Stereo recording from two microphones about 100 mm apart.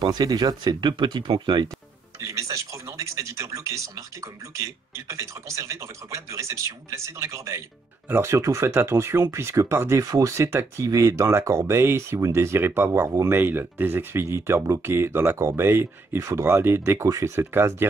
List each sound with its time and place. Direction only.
0.0 s speech: 40° right (ahead or behind)
2.1 s speech: 30° right (ahead or behind)